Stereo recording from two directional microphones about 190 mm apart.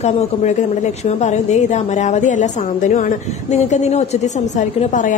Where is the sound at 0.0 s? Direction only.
35° left (ahead or behind).